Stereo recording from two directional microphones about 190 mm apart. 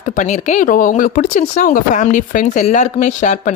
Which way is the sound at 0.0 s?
40° left (ahead or behind).